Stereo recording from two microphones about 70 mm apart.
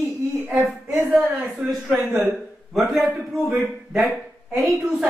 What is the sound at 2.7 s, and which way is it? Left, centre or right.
Speech, centre.